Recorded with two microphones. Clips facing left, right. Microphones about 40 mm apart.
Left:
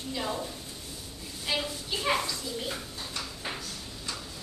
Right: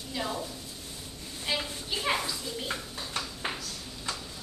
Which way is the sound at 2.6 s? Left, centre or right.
Right.